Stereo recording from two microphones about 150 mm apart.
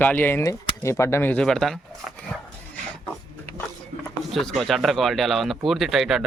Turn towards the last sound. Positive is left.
turn(degrees=0)  # may be behind; listen again after turning